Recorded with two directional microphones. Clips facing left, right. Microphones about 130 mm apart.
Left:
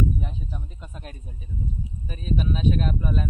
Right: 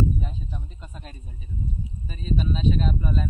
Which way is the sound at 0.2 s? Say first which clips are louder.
Even; 10° left (ahead or behind).